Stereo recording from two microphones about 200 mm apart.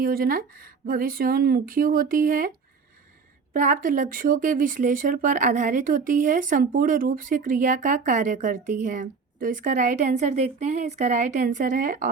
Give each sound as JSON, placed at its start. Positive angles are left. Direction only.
{"t": 0.0, "sound": "speech", "side_deg": -45}
{"t": 3.5, "sound": "speech", "side_deg": -40}